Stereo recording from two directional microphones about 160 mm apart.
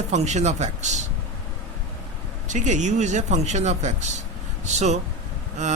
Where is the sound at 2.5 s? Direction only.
50° right (ahead or behind).